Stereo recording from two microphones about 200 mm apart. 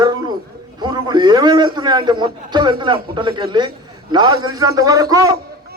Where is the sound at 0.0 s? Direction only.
20° right (ahead or behind).